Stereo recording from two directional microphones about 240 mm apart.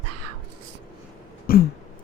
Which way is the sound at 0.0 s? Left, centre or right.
Right.